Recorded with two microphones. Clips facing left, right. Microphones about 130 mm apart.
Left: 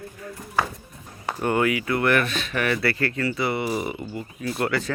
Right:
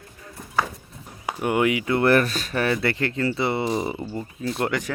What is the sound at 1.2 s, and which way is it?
Speech, 10° right (ahead or behind).